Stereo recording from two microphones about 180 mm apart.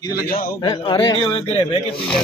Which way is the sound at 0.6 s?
25° left (ahead or behind).